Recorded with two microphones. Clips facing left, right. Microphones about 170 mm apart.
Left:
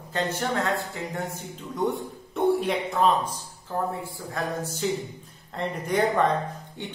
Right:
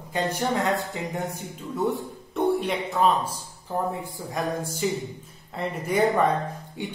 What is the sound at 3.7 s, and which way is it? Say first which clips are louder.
Speech: right 1 dB; 15° right (ahead or behind).